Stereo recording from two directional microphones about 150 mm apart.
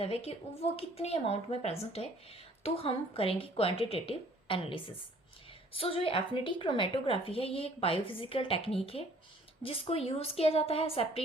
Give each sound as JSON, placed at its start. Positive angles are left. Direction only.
{"t": 0.0, "sound": "a woman's voice", "side_deg": 40}